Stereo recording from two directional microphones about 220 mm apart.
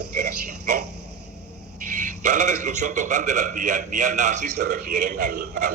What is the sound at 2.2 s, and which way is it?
A man's voice, 35° right (ahead or behind).